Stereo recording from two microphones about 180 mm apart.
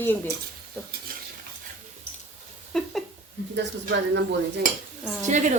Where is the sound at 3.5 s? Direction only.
80° right.